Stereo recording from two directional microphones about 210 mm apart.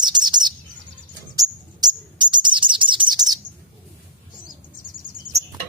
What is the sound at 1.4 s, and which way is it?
Bird, 20° right (ahead or behind).